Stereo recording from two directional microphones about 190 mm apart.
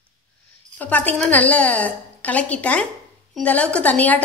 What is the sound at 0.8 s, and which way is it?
A woman's voice, 10° left (ahead or behind).